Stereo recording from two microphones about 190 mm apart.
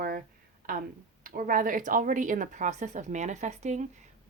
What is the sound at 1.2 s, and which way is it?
Speech, 45° right (ahead or behind).